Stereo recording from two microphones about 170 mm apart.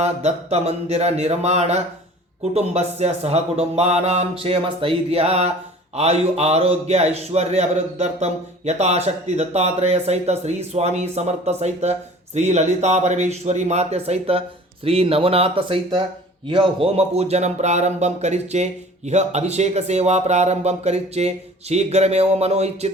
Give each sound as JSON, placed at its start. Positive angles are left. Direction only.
{"t": 0.0, "sound": "a man's voice", "side_deg": -40}